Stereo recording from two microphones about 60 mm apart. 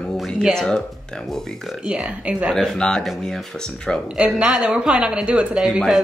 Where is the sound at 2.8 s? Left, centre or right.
Centre.